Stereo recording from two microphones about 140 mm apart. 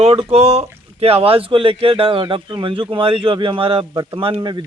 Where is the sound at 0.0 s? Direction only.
45° right (ahead or behind).